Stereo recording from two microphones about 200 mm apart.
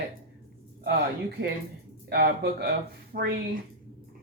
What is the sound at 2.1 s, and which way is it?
Speech, 50° right (ahead or behind).